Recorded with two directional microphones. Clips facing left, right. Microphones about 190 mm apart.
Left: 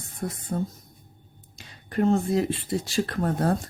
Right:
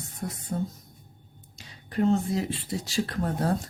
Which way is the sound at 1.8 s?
55° left (ahead or behind).